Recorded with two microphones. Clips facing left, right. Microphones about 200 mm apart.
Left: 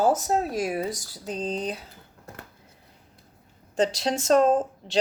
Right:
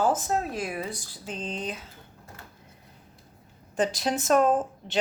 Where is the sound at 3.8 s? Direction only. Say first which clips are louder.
Left 2 dB; 25° left (ahead or behind).